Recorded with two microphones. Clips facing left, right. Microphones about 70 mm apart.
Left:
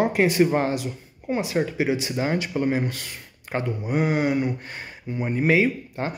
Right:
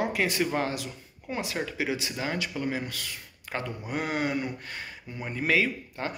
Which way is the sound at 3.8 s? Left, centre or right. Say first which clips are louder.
Left 7 dB; centre.